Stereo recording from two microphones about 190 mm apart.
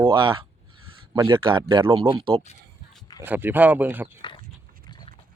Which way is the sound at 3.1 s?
10° right (ahead or behind).